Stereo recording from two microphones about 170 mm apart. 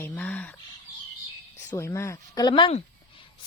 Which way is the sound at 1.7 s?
15° left (ahead or behind).